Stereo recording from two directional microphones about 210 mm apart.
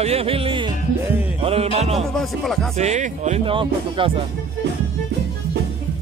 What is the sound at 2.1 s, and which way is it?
Speech, centre (ahead or behind).